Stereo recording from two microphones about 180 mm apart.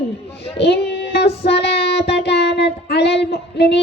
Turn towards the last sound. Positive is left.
turn(degrees=70)  # may be behind; listen again after turning